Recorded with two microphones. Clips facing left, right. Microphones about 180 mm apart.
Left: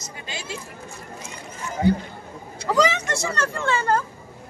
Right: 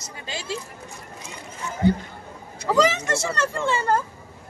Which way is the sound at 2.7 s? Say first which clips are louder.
Right 1 dB; 5° right (ahead or behind).